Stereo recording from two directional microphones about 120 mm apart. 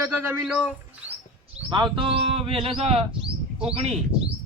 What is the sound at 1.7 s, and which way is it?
A man's voice, 45° right (ahead or behind).